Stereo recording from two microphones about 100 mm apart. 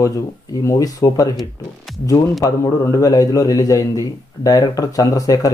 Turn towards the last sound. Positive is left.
turn(degrees=40)  # may be behind; listen again after turning